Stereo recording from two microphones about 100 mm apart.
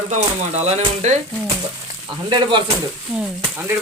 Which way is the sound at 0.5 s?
90° right.